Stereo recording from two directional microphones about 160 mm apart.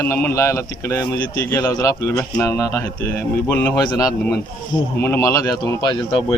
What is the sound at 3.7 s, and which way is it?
Speech, 25° left (ahead or behind).